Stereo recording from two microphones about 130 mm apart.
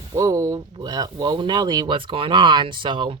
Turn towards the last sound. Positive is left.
turn(degrees=-40)  # may be behind; listen again after turning